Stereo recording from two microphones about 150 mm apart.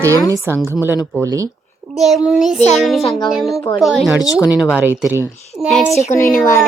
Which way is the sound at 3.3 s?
Centre (ahead or behind).